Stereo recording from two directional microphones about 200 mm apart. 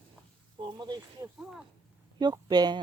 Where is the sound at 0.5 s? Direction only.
20° right (ahead or behind).